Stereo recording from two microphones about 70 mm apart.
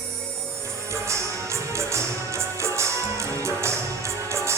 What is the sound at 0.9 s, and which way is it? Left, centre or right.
Music, right.